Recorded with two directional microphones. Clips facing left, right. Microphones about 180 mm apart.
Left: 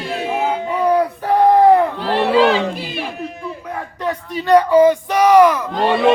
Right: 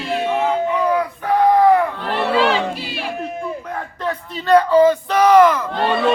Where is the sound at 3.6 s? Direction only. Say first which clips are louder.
Left 1 dB; 10° left (ahead or behind).